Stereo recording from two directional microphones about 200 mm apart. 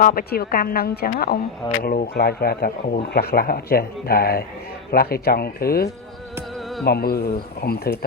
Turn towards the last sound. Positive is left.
turn(degrees=50)  # may be behind; listen again after turning